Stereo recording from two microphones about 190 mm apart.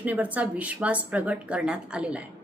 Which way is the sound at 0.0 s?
10° right (ahead or behind).